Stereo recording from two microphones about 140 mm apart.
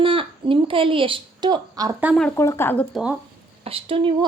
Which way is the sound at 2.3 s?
20° left (ahead or behind).